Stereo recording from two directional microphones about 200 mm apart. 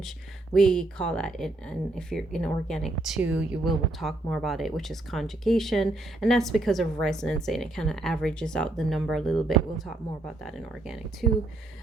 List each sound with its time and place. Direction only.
0.5 s a woman's voice: 5° left (ahead or behind)